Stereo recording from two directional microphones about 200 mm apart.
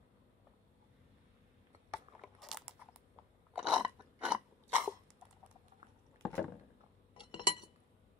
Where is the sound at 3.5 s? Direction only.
5° right (ahead or behind).